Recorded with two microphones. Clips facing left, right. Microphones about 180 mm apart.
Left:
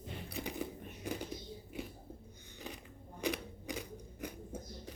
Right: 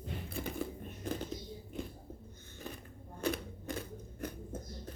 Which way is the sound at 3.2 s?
15° left (ahead or behind).